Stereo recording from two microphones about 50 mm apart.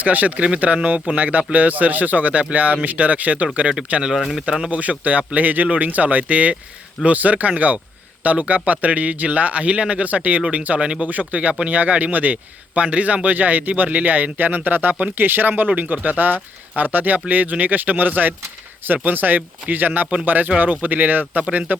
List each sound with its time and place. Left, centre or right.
0.0 s speech: right
4.2 s speech: centre
4.4 s speech: centre
4.7 s speech: right